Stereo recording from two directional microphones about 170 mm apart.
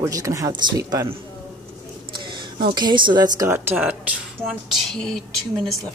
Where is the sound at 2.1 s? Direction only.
25° right (ahead or behind).